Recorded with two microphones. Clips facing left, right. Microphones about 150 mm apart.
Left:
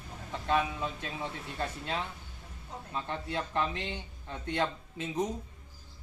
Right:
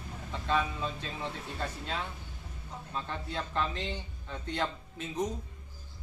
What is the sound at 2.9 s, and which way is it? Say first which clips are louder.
Speech: left 2 dB; 15° left (ahead or behind).